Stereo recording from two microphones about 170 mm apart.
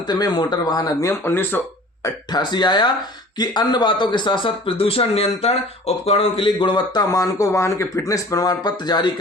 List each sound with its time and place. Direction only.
0.1 s speech: 25° left (ahead or behind)
1.2 s speech: 10° left (ahead or behind)
2.0 s speech: 25° left (ahead or behind)